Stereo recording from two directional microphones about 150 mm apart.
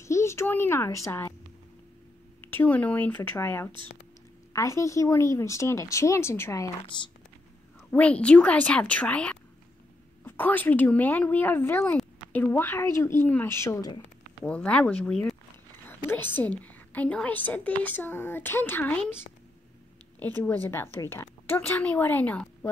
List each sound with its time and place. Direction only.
0.0 s a child's voice: 20° left (ahead or behind)
2.5 s a woman's voice: 10° left (ahead or behind)
7.9 s a woman's voice: 10° left (ahead or behind); by 14.0 s 25° left (ahead or behind)
14.4 s a woman's voice: 10° left (ahead or behind)
20.2 s a woman's voice: 10° left (ahead or behind)